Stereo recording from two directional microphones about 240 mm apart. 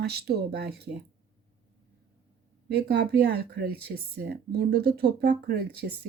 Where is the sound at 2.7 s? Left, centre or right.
Right.